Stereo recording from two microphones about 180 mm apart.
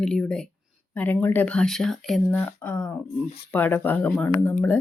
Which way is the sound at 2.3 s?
10° left (ahead or behind).